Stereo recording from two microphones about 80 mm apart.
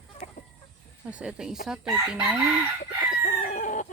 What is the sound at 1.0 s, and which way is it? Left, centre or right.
Chicken, centre.